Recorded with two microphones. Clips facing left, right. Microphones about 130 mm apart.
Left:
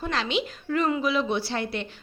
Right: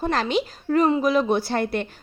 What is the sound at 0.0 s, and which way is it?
A woman's voice, 45° right (ahead or behind).